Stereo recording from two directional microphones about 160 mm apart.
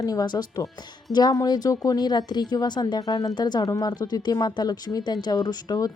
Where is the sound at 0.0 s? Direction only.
25° left (ahead or behind).